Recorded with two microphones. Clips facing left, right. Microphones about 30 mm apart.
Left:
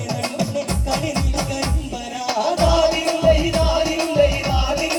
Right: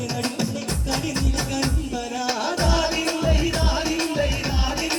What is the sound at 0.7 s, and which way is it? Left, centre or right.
Music, left.